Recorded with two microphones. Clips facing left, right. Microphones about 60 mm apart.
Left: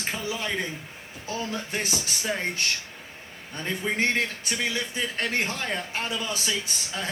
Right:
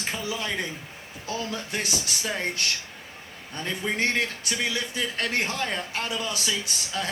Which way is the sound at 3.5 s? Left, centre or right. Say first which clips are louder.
Even; left.